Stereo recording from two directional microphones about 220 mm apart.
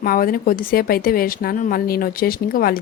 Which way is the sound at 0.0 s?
40° left (ahead or behind).